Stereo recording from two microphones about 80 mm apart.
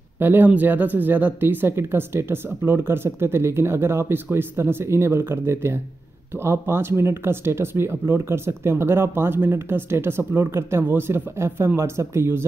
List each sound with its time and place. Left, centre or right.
0.2 s speech: right